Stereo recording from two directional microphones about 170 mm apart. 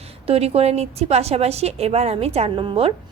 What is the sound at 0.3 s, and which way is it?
A woman's voice, 35° right (ahead or behind).